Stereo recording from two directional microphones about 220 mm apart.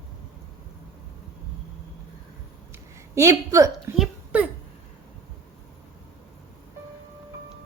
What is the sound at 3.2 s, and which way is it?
Speech, 15° right (ahead or behind).